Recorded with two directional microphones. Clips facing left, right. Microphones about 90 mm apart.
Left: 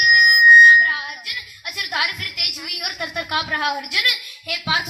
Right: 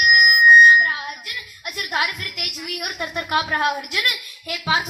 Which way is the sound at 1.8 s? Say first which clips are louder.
Right 1 dB; 40° right (ahead or behind).